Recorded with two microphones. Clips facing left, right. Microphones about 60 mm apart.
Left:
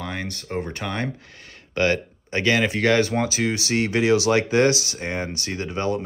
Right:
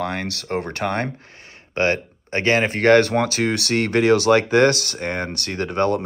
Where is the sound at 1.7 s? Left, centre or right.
Right.